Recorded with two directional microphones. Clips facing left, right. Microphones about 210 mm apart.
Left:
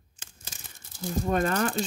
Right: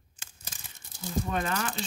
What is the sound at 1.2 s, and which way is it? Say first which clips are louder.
Speech: left 8 dB; 45° left (ahead or behind).